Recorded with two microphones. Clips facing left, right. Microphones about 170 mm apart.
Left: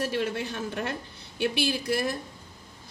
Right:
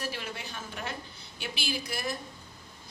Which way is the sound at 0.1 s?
65° left (ahead or behind).